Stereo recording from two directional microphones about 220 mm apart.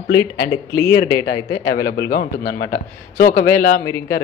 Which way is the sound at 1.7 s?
45° left (ahead or behind).